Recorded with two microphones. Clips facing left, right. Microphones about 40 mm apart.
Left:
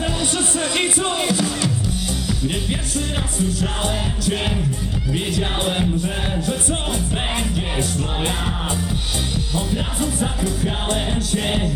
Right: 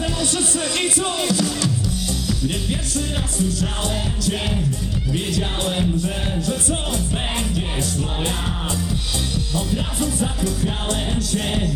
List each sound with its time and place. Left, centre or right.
0.0 s music: left
10.0 s music: left